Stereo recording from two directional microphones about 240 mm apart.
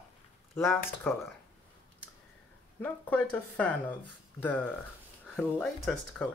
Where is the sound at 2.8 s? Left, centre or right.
Centre.